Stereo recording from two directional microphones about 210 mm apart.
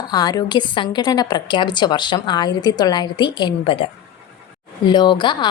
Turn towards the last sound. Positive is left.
turn(degrees=20)  # may be behind; listen again after turning